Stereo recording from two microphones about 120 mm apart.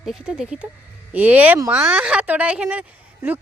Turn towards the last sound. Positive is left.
turn(degrees=-15)  # may be behind; listen again after turning